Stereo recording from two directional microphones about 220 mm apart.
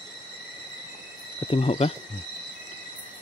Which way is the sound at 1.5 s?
25° left (ahead or behind).